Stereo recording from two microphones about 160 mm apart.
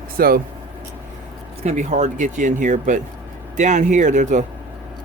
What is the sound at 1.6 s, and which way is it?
Speech, 45° right (ahead or behind).